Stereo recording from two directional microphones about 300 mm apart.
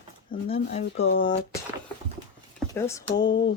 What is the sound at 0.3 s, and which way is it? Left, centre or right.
Speech, centre.